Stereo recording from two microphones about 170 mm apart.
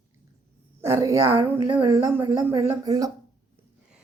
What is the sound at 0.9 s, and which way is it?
Speech, 15° right (ahead or behind).